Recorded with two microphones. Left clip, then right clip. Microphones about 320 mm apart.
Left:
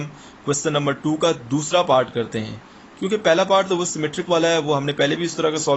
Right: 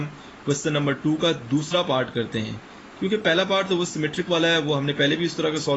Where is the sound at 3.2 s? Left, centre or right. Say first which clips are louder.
Left 5 dB; centre.